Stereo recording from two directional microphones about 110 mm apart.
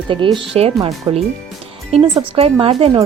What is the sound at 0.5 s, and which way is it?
Speech, 60° right (ahead or behind).